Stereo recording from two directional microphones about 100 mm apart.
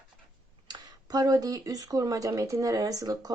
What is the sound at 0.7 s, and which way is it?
Speech, 40° right (ahead or behind).